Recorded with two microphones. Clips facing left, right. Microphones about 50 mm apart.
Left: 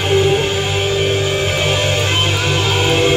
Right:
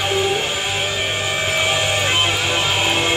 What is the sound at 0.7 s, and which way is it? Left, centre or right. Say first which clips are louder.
Music: left 5 dB; right.